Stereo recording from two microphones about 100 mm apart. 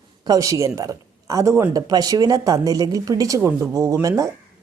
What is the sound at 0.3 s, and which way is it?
Speech, 35° right (ahead or behind).